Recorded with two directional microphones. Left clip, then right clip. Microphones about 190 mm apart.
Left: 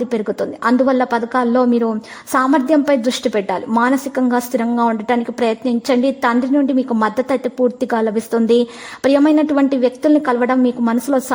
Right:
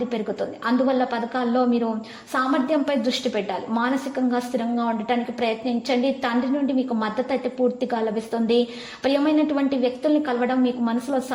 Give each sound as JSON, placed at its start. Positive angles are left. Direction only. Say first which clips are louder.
{"t": 0.1, "sound": "a woman's voice", "louder": "left 7 dB", "side_deg": 40}